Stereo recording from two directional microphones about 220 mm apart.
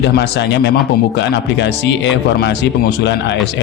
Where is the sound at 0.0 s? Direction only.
50° left (ahead or behind).